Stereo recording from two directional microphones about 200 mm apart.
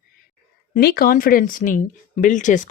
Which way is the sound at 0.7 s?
50° left (ahead or behind).